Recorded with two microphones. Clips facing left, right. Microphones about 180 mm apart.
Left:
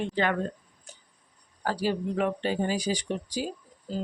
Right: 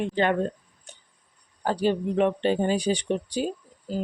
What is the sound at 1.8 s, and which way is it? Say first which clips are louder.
Speech: right 5 dB; 25° right (ahead or behind).